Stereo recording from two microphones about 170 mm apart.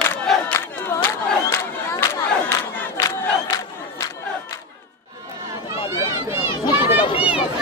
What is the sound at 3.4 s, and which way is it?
Crowd, 20° left (ahead or behind).